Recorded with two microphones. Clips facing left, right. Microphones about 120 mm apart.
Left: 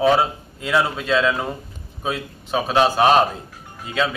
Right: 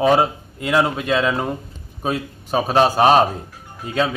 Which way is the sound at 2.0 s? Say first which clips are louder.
Right 3 dB; 40° right (ahead or behind).